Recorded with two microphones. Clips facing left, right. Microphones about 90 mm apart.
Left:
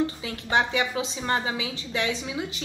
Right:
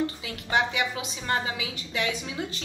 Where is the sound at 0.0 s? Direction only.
30° left (ahead or behind).